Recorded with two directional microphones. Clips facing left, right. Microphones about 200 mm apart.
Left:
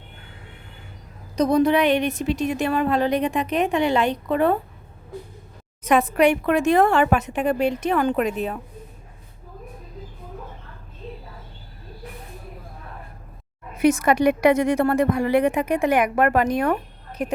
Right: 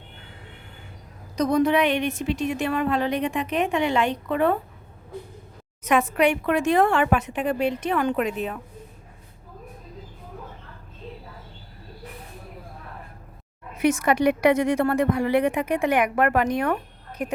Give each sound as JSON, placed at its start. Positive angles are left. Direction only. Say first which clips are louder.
{"t": 1.4, "sound": "a woman's voice", "louder": "left 2 dB", "side_deg": 30}
{"t": 5.8, "sound": "a woman's voice", "louder": "left 3 dB", "side_deg": 35}
{"t": 13.7, "sound": "a woman's voice", "louder": "left 3 dB", "side_deg": 35}